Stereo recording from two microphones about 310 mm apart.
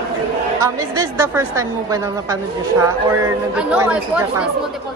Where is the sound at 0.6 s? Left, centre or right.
Centre.